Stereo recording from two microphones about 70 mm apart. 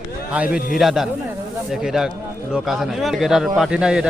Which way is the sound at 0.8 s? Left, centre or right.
Centre.